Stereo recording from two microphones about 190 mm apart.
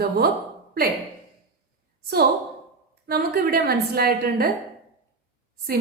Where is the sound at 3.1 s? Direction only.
50° right (ahead or behind).